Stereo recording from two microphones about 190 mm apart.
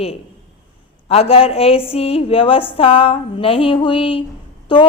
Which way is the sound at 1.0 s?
30° left (ahead or behind).